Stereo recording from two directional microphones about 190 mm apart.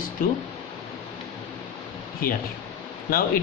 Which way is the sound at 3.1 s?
50° left (ahead or behind).